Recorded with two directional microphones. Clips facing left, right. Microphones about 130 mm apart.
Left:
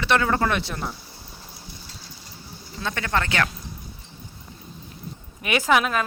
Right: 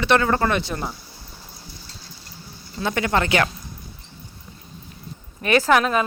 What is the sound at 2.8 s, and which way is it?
Speech, 15° right (ahead or behind).